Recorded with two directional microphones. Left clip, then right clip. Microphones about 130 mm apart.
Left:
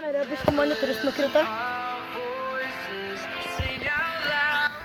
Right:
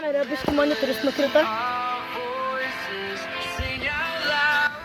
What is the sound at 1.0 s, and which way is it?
Speech, 40° right (ahead or behind).